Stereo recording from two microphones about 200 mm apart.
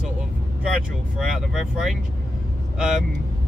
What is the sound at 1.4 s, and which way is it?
Speech, centre (ahead or behind).